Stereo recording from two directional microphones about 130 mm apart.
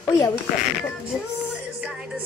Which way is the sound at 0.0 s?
20° left (ahead or behind).